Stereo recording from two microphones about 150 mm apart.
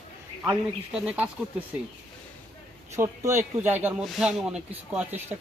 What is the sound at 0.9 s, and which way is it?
Speech, 5° right (ahead or behind).